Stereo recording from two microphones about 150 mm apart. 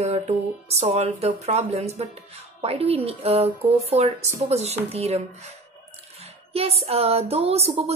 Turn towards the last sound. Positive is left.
turn(degrees=-45)  # may be behind; listen again after turning